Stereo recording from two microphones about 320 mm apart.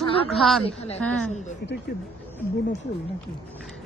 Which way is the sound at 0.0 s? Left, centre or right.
Centre.